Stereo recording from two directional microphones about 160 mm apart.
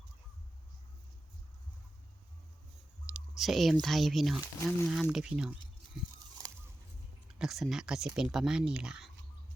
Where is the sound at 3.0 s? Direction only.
5° right (ahead or behind).